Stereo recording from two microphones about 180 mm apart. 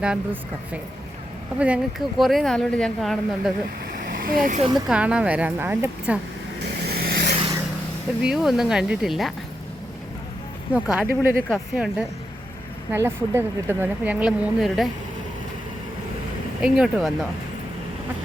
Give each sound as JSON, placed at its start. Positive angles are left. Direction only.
{"t": 1.5, "sound": "speech", "side_deg": -5}
{"t": 4.0, "sound": "vehicle", "side_deg": -50}
{"t": 4.7, "sound": "speech", "side_deg": -5}
{"t": 6.8, "sound": "vehicle", "side_deg": -60}
{"t": 8.2, "sound": "speech", "side_deg": -5}
{"t": 10.8, "sound": "speech", "side_deg": -5}
{"t": 16.6, "sound": "speech", "side_deg": -5}